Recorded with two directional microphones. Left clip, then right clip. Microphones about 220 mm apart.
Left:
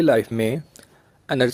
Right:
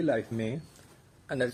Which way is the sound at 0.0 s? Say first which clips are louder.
Left 11 dB; 50° left (ahead or behind).